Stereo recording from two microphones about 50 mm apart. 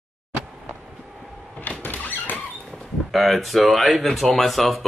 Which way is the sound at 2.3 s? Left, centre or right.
Left.